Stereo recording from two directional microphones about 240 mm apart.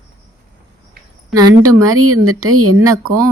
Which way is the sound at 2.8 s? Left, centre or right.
Centre.